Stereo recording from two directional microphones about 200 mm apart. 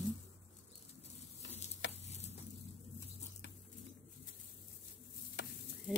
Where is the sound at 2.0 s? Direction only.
35° left (ahead or behind).